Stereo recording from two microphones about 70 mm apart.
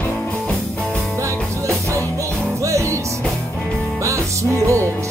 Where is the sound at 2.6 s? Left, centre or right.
Right.